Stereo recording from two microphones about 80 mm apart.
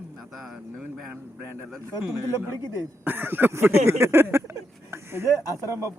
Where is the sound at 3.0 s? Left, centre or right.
Right.